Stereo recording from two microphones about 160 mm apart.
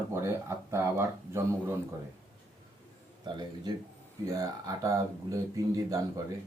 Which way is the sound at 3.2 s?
25° right (ahead or behind).